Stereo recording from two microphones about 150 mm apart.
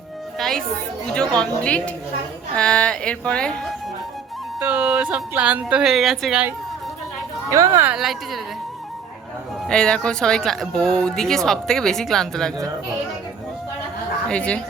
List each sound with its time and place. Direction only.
0.3 s speech: centre (ahead or behind)
4.6 s speech: 10° right (ahead or behind)
7.5 s speech: 20° right (ahead or behind)
7.9 s speech: 5° right (ahead or behind)
9.6 s speech: 5° left (ahead or behind)
14.3 s speech: 5° left (ahead or behind)